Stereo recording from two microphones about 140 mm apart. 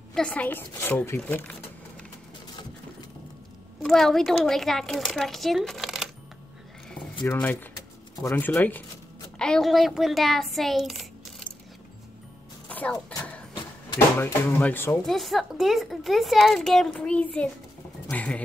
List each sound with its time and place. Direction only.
0.1 s a woman's voice: 10° left (ahead or behind)
3.8 s a woman's voice: centre (ahead or behind)
7.3 s a woman's voice: 15° left (ahead or behind)
12.6 s music: 10° left (ahead or behind)
13.9 s a woman's voice: 15° left (ahead or behind)
15.0 s a woman's voice: centre (ahead or behind)